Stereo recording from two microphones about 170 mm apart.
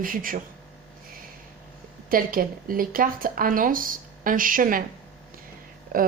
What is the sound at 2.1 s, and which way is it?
Speech, 55° right (ahead or behind).